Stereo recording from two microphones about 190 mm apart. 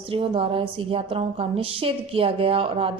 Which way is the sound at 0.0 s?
30° right (ahead or behind).